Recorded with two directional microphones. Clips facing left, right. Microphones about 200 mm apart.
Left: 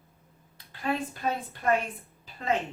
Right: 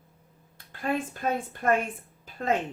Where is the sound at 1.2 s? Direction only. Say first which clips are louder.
Right 2 dB; 50° right (ahead or behind).